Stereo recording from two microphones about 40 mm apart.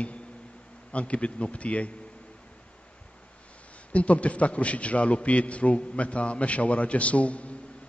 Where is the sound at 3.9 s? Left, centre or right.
Left.